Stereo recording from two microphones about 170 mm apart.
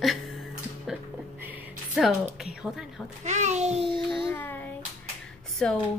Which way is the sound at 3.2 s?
45° right (ahead or behind).